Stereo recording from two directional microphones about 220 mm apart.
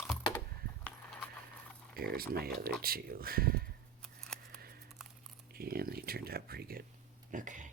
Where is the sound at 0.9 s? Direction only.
5° left (ahead or behind).